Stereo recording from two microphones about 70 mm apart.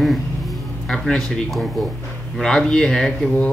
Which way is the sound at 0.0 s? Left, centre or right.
Centre.